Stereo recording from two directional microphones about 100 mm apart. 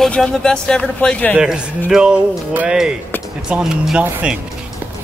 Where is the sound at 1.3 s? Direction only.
10° right (ahead or behind).